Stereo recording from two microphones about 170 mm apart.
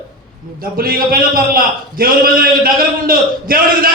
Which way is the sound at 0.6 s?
60° right (ahead or behind).